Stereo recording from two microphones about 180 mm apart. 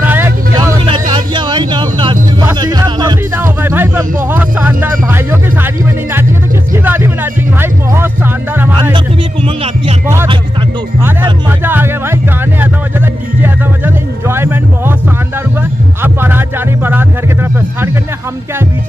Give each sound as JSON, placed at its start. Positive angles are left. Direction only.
{"t": 0.0, "sound": "vehicle", "side_deg": -10}
{"t": 0.8, "sound": "a sound", "side_deg": -25}
{"t": 2.6, "sound": "music", "side_deg": -20}
{"t": 3.3, "sound": "music", "side_deg": -10}
{"t": 6.7, "sound": "music", "side_deg": -15}
{"t": 8.9, "sound": "music", "side_deg": -30}
{"t": 11.4, "sound": "music", "side_deg": -10}
{"t": 16.0, "sound": "music", "side_deg": -10}